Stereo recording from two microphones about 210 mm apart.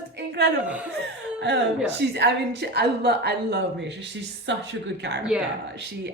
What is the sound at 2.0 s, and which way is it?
A woman's voice, 55° right (ahead or behind).